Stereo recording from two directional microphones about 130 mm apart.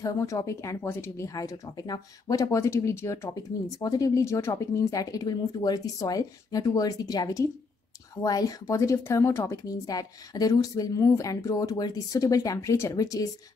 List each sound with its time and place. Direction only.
0.0 s speech: 25° left (ahead or behind)